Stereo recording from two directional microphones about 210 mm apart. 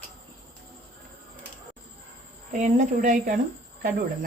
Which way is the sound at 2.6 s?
35° right (ahead or behind).